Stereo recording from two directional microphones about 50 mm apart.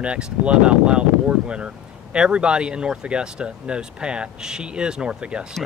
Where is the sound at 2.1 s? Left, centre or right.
Centre.